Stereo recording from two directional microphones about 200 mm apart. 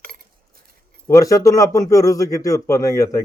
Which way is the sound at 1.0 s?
15° left (ahead or behind).